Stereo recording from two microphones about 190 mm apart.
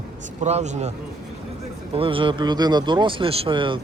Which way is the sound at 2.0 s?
30° right (ahead or behind).